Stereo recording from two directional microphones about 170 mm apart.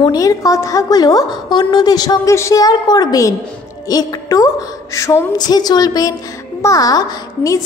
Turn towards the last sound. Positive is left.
turn(degrees=20)  # may be behind; listen again after turning